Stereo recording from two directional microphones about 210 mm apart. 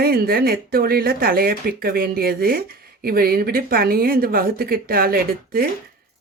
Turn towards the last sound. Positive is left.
turn(degrees=-45)  # may be behind; listen again after turning